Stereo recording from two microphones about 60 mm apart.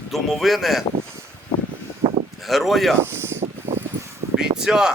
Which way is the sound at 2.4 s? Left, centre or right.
Centre.